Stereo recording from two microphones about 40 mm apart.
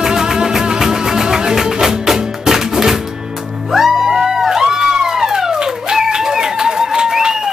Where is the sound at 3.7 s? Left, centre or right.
Centre.